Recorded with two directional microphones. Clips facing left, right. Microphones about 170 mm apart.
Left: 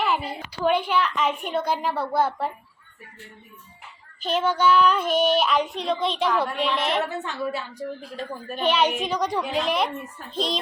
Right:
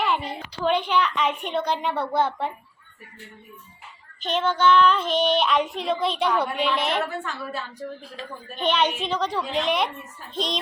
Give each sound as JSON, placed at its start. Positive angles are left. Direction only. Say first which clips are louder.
{"t": 0.0, "sound": "a sound", "louder": "even", "side_deg": 5}
{"t": 0.6, "sound": "child singing", "louder": "even", "side_deg": 10}
{"t": 4.2, "sound": "child singing", "louder": "even", "side_deg": 5}
{"t": 7.0, "sound": "a woman's voice", "louder": "left 2 dB", "side_deg": 20}
{"t": 8.5, "sound": "a woman's voice", "louder": "left 1 dB", "side_deg": 5}
{"t": 10.3, "sound": "child singing", "louder": "left 1 dB", "side_deg": 0}